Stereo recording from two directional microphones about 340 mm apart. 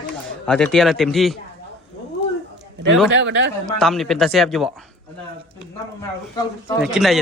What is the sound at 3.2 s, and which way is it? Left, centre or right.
Speech, right.